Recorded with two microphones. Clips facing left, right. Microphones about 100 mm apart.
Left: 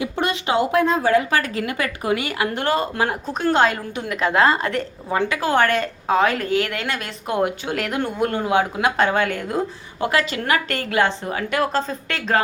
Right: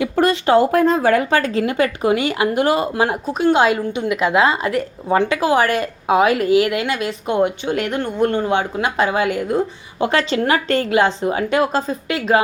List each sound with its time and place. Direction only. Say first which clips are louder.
0.2 s speech: right 7 dB; 40° right (ahead or behind)
1.3 s speech: right 5 dB; 30° right (ahead or behind)
3.2 s a woman's voice: right 3 dB; 5° right (ahead or behind)
5.1 s speech: right 5 dB; 25° right (ahead or behind)
5.5 s a woman's voice: right 2 dB; 10° right (ahead or behind)
10.0 s speech: right 4 dB; 30° right (ahead or behind)
11.8 s a woman's voice: right 4 dB; 5° right (ahead or behind)